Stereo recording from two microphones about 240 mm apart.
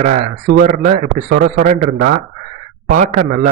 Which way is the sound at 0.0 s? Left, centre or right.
Right.